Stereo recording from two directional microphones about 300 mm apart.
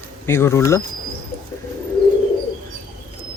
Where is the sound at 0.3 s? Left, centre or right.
Centre.